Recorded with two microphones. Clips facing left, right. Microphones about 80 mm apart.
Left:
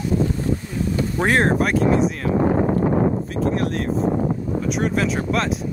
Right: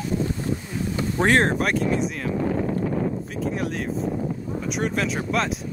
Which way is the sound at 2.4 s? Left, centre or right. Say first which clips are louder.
Left 6 dB; left.